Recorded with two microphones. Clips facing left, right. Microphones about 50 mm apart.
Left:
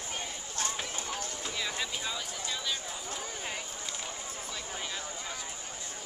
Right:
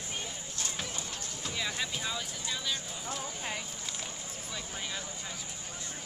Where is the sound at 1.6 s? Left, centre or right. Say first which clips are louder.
Right 1 dB; centre.